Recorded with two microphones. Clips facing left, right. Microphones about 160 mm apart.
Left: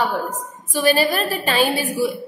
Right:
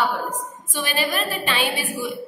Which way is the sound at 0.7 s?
40° left (ahead or behind).